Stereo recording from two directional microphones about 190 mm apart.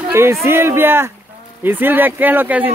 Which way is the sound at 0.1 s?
15° right (ahead or behind).